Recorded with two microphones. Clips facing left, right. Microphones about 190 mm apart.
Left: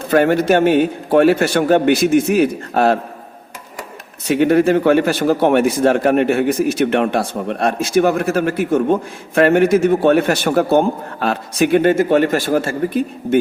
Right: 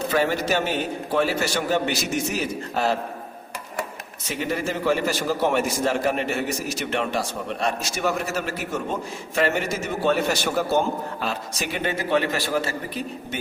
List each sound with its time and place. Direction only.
0.1 s a man's voice: 55° left (ahead or behind)
4.3 s a man's voice: 60° left (ahead or behind)